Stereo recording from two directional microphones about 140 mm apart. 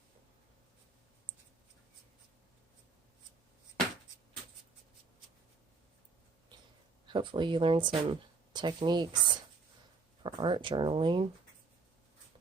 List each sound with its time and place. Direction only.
7.1 s speech: 35° right (ahead or behind)